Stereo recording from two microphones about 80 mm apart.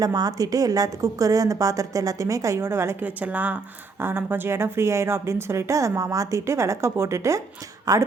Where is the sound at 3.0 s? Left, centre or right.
Centre.